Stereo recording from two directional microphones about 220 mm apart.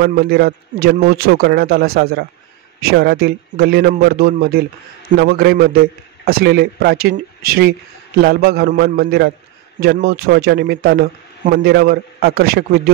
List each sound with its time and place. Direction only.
0.0 s a man's voice: 45° right (ahead or behind)